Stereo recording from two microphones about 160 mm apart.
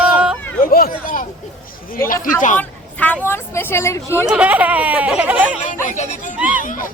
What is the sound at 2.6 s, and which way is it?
Speech, 10° left (ahead or behind).